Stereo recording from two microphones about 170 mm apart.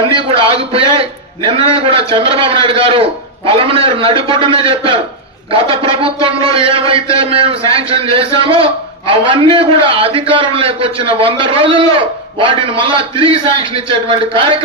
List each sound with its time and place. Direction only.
0.1 s a man's voice: 30° right (ahead or behind)